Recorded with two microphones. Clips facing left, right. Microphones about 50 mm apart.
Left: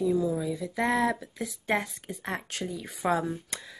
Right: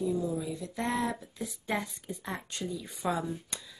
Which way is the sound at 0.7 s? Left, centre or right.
Left.